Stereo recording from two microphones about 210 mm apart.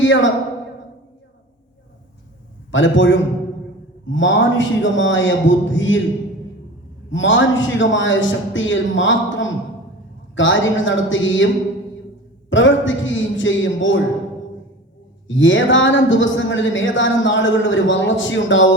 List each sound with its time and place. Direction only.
0.0 s a man's voice: 60° left (ahead or behind)
2.7 s a woman's voice: 65° left (ahead or behind)
7.1 s a woman's voice: 60° left (ahead or behind)
12.5 s a woman's voice: 65° left (ahead or behind)
15.3 s a woman's voice: 65° left (ahead or behind)